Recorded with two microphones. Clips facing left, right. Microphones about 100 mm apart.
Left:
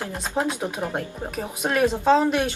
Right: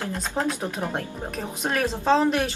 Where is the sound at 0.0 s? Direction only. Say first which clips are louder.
Left 1 dB; 15° left (ahead or behind).